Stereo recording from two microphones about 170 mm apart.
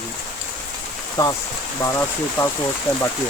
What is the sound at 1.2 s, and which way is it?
Speech, 20° left (ahead or behind).